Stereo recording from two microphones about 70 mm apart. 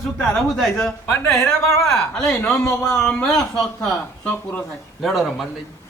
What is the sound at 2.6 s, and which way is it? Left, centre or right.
Speech, left.